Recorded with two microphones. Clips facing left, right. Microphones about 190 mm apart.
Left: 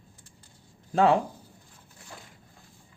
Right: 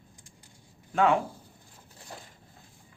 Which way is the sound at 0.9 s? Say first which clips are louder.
Left 2 dB; 35° left (ahead or behind).